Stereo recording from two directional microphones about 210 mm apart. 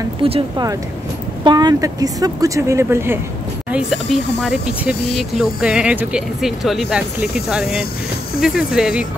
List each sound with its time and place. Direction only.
0.2 s speech: 20° right (ahead or behind)
4.4 s speech: 5° right (ahead or behind)